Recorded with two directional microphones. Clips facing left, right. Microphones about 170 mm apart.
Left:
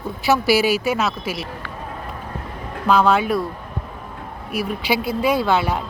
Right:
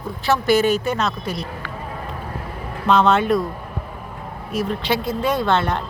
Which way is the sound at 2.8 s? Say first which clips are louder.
Right 1 dB; 5° left (ahead or behind).